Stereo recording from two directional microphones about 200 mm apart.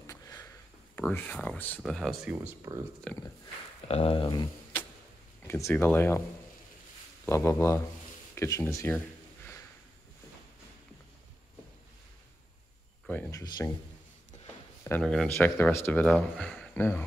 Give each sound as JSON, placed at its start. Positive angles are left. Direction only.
{"t": 0.0, "sound": "a sound", "side_deg": 15}
{"t": 0.9, "sound": "speech", "side_deg": 10}
{"t": 3.8, "sound": "speech", "side_deg": 30}
{"t": 5.5, "sound": "speech", "side_deg": 10}
{"t": 7.2, "sound": "speech", "side_deg": 15}
{"t": 13.3, "sound": "speech", "side_deg": 20}
{"t": 14.9, "sound": "speech", "side_deg": 5}